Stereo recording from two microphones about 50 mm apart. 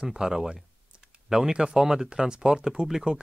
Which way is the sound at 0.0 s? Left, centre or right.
Centre.